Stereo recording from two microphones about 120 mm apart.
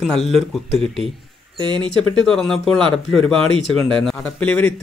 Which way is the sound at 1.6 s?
40° right (ahead or behind).